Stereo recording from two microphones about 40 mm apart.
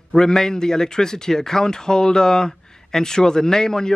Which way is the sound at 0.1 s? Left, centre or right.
Centre.